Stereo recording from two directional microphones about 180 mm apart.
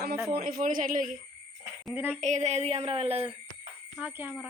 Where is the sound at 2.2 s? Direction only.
40° right (ahead or behind).